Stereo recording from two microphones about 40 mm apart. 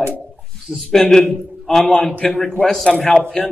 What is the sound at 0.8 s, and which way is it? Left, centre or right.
Speech, centre.